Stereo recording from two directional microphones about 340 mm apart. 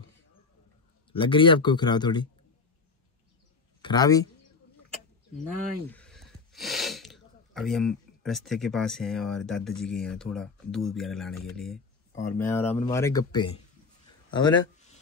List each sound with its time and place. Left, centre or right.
1.1 s speech: centre
3.8 s speech: centre
5.9 s speech: centre
14.3 s a sound: centre